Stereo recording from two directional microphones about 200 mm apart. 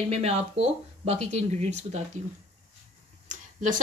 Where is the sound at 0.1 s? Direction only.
30° right (ahead or behind).